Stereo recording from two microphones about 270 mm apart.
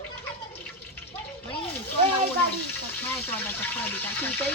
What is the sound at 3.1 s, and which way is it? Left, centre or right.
A woman's voice, centre.